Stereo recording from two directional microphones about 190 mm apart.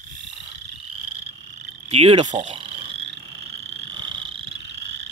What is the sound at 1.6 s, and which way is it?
Frog, 35° right (ahead or behind).